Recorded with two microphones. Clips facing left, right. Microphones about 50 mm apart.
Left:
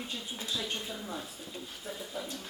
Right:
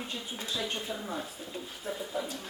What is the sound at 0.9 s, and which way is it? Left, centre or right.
A man's voice, centre.